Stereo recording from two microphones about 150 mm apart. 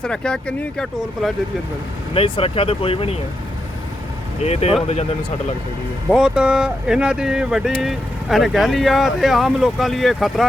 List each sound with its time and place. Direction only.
0.0 s speech: 5° left (ahead or behind)
2.1 s speech: 35° left (ahead or behind)
4.4 s speech: 45° left (ahead or behind)
6.1 s speech: 5° right (ahead or behind)